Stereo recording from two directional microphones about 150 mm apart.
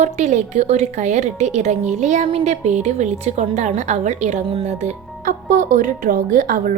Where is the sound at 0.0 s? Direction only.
50° right (ahead or behind).